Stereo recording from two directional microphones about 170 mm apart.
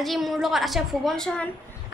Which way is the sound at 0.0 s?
Centre (ahead or behind).